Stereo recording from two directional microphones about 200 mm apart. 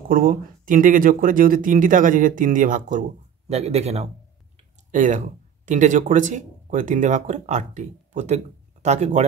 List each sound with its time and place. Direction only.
0.1 s speech: 45° right (ahead or behind)